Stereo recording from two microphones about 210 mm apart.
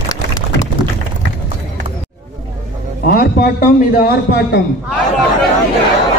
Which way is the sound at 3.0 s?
40° left (ahead or behind).